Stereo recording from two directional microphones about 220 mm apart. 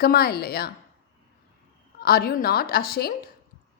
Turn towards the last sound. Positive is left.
turn(degrees=45)  # may be behind; listen again after turning